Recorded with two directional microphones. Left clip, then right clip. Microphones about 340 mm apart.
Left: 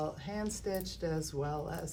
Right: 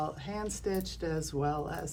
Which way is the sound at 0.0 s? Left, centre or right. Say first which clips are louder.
Right 2 dB; centre.